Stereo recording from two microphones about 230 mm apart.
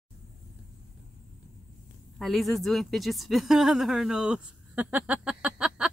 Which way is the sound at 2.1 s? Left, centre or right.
Centre.